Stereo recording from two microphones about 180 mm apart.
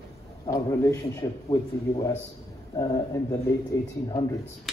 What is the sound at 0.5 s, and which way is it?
A man's voice, 15° left (ahead or behind).